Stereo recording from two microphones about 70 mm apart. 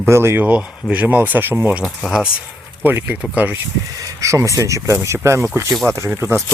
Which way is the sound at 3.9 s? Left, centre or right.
Right.